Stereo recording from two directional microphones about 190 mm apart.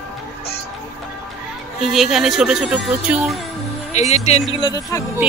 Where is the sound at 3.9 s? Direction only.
35° left (ahead or behind).